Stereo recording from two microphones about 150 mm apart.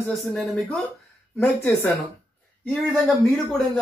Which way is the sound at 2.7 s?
Centre (ahead or behind).